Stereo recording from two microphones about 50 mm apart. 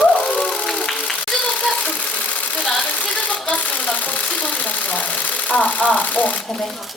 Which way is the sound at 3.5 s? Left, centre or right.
Left.